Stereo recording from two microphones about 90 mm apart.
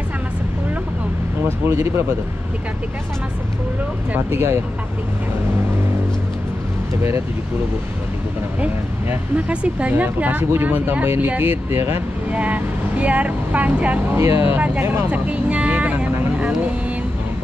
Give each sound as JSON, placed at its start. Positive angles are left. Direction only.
{"t": 1.7, "sound": "speech", "side_deg": -25}
{"t": 4.1, "sound": "speech", "side_deg": -25}
{"t": 7.0, "sound": "speech", "side_deg": -30}
{"t": 9.1, "sound": "speech", "side_deg": -15}
{"t": 12.3, "sound": "speech", "side_deg": -15}
{"t": 14.1, "sound": "speech", "side_deg": -30}